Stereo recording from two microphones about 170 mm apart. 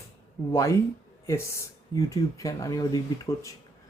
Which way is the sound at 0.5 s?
15° left (ahead or behind).